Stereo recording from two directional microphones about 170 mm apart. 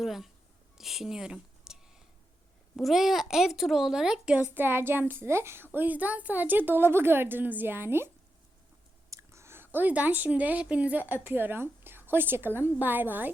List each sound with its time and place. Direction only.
0.0 s a child's voice: centre (ahead or behind)